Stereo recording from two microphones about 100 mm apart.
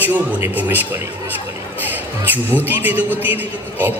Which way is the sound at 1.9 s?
20° right (ahead or behind).